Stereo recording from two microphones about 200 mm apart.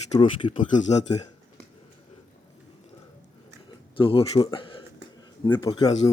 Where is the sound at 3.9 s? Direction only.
25° left (ahead or behind).